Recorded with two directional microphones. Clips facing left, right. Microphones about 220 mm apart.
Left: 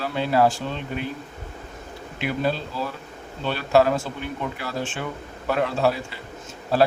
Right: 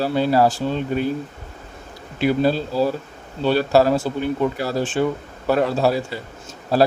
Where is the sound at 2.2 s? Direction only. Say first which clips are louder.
Right 7 dB; 35° right (ahead or behind).